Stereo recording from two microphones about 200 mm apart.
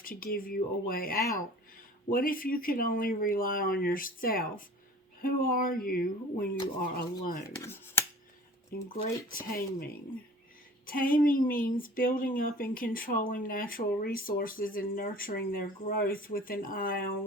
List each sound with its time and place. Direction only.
0.0 s speech: 45° left (ahead or behind)
7.6 s a sound: 10° left (ahead or behind)
8.9 s speech: 45° left (ahead or behind)